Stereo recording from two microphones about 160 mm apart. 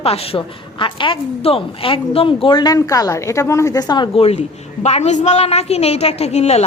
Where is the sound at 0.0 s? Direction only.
35° left (ahead or behind).